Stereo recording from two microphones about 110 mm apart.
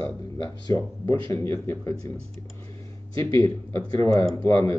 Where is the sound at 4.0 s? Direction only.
30° left (ahead or behind).